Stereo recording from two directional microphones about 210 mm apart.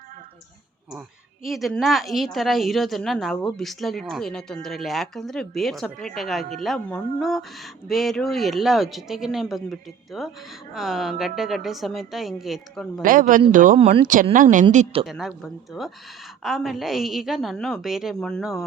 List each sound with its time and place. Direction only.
1.5 s a woman's voice: centre (ahead or behind)
13.0 s speech: 40° right (ahead or behind)
15.0 s a woman's voice: centre (ahead or behind)